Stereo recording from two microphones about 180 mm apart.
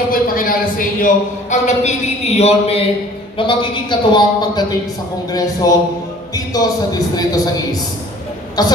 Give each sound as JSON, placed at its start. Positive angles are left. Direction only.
{"t": 0.1, "sound": "a man's voice", "side_deg": 50}
{"t": 8.6, "sound": "a man's voice", "side_deg": 20}